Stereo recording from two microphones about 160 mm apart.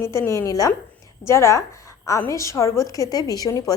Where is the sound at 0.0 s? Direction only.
15° left (ahead or behind).